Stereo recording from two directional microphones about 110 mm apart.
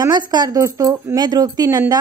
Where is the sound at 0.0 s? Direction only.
40° right (ahead or behind).